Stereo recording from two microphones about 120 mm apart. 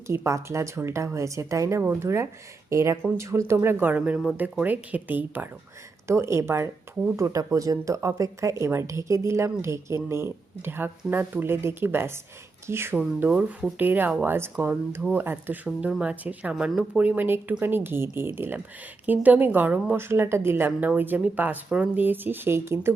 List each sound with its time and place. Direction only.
0.1 s a woman's voice: 25° right (ahead or behind)